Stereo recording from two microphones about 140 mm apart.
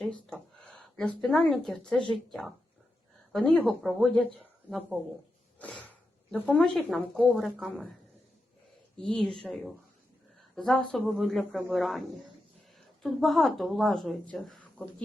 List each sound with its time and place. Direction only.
0.0 s speech: 5° left (ahead or behind)
3.3 s speech: 5° left (ahead or behind)
5.5 s sniff: 10° left (ahead or behind)
6.5 s speech: centre (ahead or behind)
9.0 s speech: 5° left (ahead or behind)